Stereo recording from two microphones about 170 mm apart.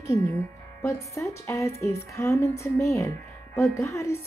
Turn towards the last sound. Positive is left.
turn(degrees=15)  # may be behind; listen again after turning